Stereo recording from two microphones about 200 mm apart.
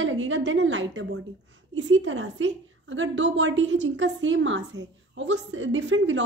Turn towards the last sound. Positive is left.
turn(degrees=-65)  # may be behind; listen again after turning